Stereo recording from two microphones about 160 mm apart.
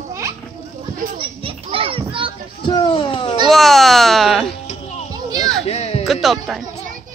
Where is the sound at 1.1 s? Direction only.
35° right (ahead or behind).